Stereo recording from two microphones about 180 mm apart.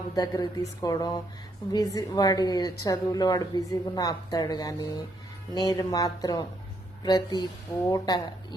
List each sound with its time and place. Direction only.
0.2 s a woman's voice: 20° left (ahead or behind)